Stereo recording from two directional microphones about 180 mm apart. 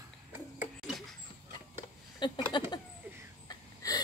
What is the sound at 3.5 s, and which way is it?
Wheeze, 20° left (ahead or behind).